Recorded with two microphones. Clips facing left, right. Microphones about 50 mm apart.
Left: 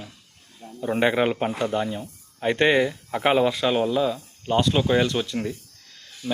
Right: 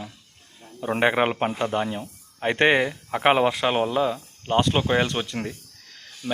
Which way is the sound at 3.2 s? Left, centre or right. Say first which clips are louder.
Right 1 dB; right.